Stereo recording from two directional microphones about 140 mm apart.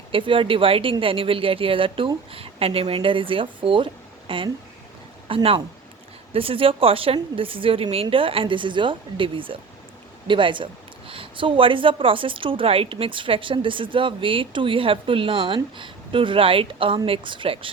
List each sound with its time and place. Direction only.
0.1 s speech: 40° right (ahead or behind)